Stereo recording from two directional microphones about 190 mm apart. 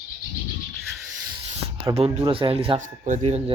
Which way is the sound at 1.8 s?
30° right (ahead or behind).